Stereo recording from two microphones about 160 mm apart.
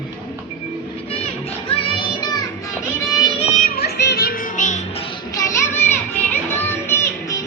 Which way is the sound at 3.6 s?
85° left.